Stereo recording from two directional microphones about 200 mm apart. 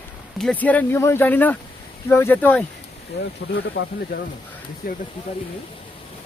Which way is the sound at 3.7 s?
55° left (ahead or behind).